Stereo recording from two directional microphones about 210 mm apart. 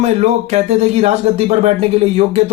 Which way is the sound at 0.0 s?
30° right (ahead or behind).